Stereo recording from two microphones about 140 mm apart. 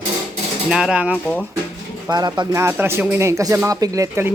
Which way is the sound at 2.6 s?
15° right (ahead or behind).